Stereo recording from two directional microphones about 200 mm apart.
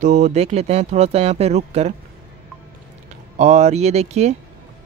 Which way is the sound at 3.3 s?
35° right (ahead or behind).